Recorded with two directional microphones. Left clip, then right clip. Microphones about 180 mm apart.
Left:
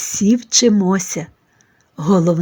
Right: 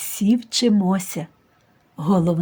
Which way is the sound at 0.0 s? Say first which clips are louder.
Left 5 dB; 15° left (ahead or behind).